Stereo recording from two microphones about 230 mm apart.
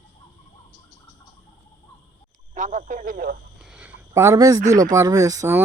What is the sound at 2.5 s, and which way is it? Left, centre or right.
Speech, right.